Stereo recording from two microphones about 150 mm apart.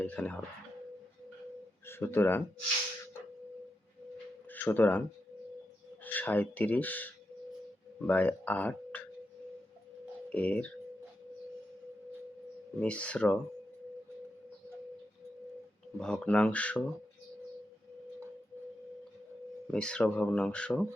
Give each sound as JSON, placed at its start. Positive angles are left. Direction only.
{"t": 0.0, "sound": "speech", "side_deg": 10}
{"t": 1.9, "sound": "speech", "side_deg": 15}
{"t": 4.5, "sound": "speech", "side_deg": 10}
{"t": 6.1, "sound": "speech", "side_deg": 10}
{"t": 10.2, "sound": "speech", "side_deg": 10}
{"t": 12.8, "sound": "speech", "side_deg": 5}
{"t": 16.0, "sound": "speech", "side_deg": 5}
{"t": 19.7, "sound": "speech", "side_deg": 5}